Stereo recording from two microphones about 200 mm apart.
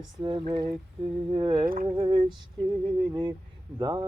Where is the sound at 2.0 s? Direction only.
25° right (ahead or behind).